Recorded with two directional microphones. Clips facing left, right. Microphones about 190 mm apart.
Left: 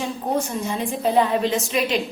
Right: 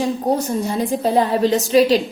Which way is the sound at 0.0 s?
35° right (ahead or behind).